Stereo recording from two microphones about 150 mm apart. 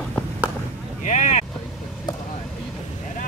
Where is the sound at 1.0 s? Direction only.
55° left (ahead or behind).